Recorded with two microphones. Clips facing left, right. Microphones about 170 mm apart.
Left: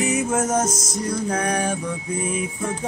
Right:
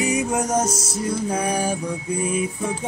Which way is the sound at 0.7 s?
30° right (ahead or behind).